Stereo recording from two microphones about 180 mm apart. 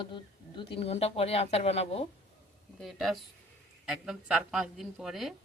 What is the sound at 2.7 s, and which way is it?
Speech, centre (ahead or behind).